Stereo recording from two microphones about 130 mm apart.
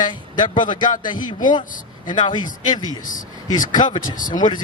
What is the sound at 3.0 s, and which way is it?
Speech, 90° left.